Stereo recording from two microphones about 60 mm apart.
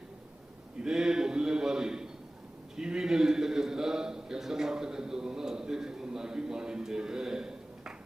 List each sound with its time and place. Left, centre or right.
0.8 s a man's voice: centre